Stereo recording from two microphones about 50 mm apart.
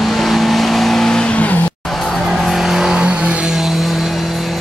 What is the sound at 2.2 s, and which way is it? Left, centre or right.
Vehicle, centre.